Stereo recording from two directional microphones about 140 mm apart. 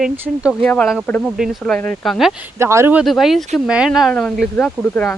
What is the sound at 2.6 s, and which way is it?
Speech, 20° right (ahead or behind).